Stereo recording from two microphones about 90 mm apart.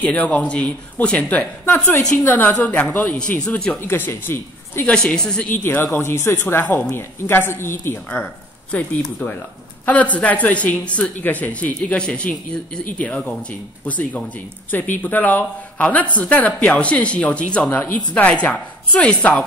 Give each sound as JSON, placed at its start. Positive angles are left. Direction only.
{"t": 0.0, "sound": "speech", "side_deg": 15}
{"t": 1.7, "sound": "speech", "side_deg": 30}
{"t": 3.8, "sound": "speech", "side_deg": 25}
{"t": 4.8, "sound": "speech", "side_deg": 10}
{"t": 5.5, "sound": "speech", "side_deg": 20}